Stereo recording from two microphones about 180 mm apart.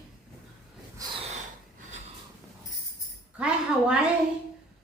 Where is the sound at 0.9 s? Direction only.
20° right (ahead or behind).